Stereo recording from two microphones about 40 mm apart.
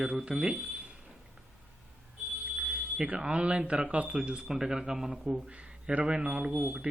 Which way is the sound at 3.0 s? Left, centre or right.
Right.